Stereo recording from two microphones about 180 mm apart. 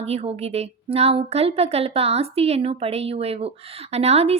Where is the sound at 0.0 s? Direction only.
35° right (ahead or behind).